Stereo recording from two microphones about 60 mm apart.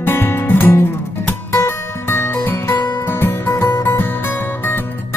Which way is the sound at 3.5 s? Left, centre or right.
Left.